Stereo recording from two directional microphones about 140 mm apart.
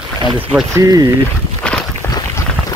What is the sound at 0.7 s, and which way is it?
Speech, 25° right (ahead or behind).